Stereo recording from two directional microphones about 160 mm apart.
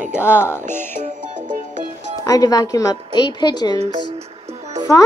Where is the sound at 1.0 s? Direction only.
50° right (ahead or behind).